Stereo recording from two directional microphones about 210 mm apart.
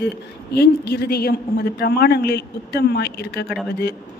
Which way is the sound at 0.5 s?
50° left (ahead or behind).